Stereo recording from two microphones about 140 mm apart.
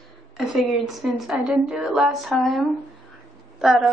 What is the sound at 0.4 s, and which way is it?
A woman's voice, centre (ahead or behind).